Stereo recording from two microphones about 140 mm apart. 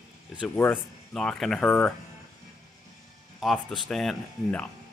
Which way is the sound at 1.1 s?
Centre (ahead or behind).